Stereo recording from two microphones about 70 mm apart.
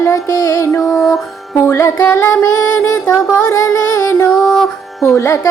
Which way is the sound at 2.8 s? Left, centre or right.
Left.